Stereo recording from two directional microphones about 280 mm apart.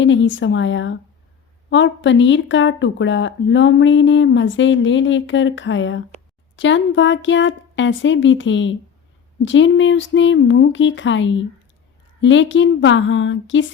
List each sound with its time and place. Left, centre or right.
0.0 s speech: left